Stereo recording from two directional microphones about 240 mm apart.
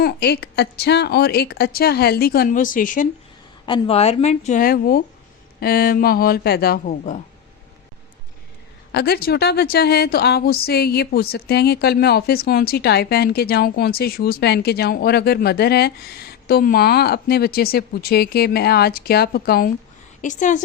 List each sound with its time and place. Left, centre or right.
0.0 s a woman's voice: left
8.9 s a woman's voice: left